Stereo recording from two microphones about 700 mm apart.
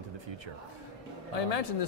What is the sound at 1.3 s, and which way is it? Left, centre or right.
Speech, left.